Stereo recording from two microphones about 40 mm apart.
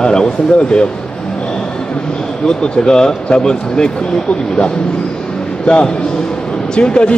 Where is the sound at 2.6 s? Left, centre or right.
Centre.